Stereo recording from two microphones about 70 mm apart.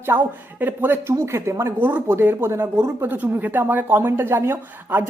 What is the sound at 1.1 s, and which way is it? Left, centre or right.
Speech, right.